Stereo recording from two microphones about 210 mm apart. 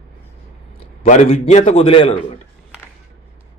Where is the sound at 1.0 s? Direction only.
35° left (ahead or behind).